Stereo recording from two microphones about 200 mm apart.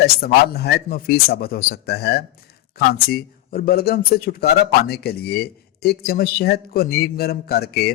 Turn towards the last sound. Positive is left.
turn(degrees=50)  # may be behind; listen again after turning